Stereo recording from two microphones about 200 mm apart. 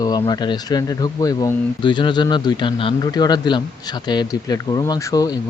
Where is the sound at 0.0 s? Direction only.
20° left (ahead or behind).